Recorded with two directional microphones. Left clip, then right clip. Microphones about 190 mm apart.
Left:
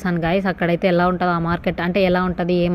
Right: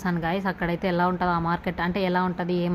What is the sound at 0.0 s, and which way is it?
A woman's voice, 15° left (ahead or behind).